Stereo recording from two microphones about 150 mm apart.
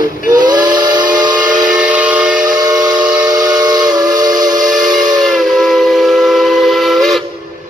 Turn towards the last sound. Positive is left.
turn(degrees=0)  # may be behind; listen again after turning